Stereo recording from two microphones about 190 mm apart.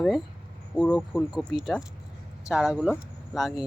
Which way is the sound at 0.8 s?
5° left (ahead or behind).